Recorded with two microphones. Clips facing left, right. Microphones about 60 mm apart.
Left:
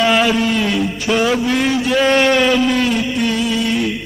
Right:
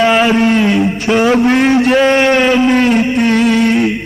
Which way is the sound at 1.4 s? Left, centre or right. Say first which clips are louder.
Right 7 dB; right.